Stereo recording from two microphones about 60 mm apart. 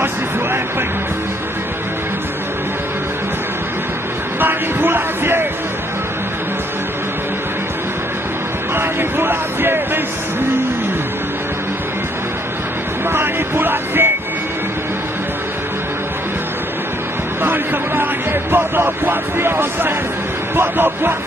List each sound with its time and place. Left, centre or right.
4.4 s a sound: right
8.7 s music: right
13.1 s music: right
17.4 s music: right
20.5 s speech: right